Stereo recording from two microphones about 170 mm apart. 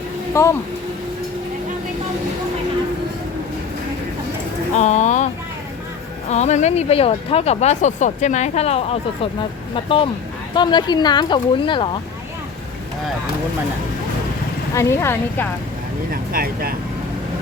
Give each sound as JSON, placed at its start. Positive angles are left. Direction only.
{"t": 0.4, "sound": "speech", "side_deg": 15}
{"t": 4.8, "sound": "speech", "side_deg": 40}
{"t": 6.3, "sound": "speech", "side_deg": 40}
{"t": 14.8, "sound": "speech", "side_deg": 15}
{"t": 16.3, "sound": "speech", "side_deg": -60}